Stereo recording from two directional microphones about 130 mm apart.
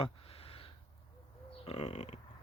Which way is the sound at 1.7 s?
55° left (ahead or behind).